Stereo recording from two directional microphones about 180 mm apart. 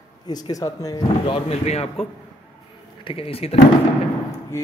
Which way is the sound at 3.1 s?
30° left (ahead or behind).